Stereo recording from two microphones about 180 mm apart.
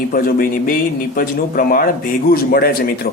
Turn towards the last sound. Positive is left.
turn(degrees=55)  # may be behind; listen again after turning